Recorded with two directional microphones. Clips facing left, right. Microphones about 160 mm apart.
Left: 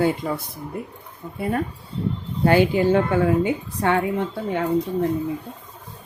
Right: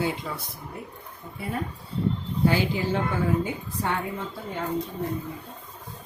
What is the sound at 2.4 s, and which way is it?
A woman's voice, 60° left (ahead or behind).